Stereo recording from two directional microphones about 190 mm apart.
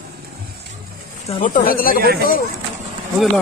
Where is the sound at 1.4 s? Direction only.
50° left (ahead or behind).